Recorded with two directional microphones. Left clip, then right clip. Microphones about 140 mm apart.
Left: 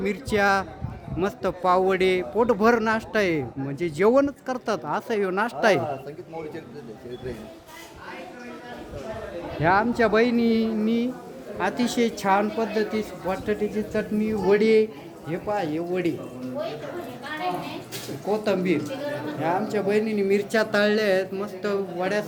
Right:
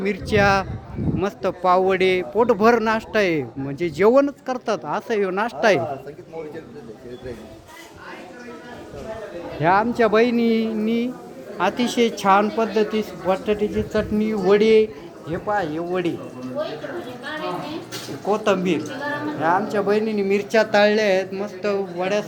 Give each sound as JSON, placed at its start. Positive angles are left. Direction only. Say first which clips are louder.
{"t": 0.0, "sound": "speech", "louder": "right 4 dB", "side_deg": 5}
{"t": 9.6, "sound": "speech", "louder": "right 3 dB", "side_deg": 0}
{"t": 15.3, "sound": "speech", "louder": "right 4 dB", "side_deg": 20}
{"t": 19.4, "sound": "speech", "louder": "right 5 dB", "side_deg": 5}